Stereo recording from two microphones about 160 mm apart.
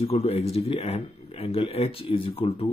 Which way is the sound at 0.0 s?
40° left (ahead or behind).